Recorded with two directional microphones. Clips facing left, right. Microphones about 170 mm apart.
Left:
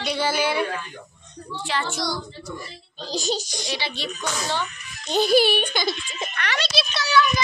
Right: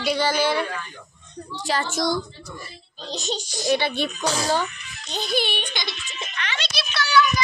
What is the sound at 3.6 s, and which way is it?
Speech, 55° right (ahead or behind).